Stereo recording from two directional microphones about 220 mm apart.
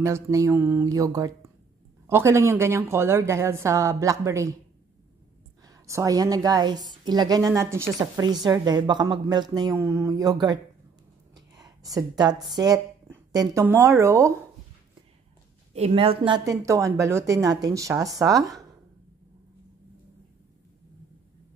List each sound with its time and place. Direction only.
0.0 s a woman's voice: 15° right (ahead or behind)
5.7 s a woman's voice: 15° right (ahead or behind)
15.7 s a woman's voice: 25° right (ahead or behind)